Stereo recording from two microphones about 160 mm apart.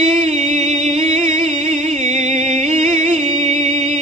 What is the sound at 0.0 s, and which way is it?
Music, 45° right (ahead or behind).